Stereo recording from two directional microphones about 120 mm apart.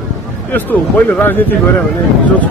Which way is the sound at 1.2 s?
15° left (ahead or behind).